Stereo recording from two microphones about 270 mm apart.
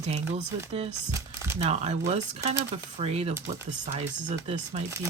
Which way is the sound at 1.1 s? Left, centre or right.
Centre.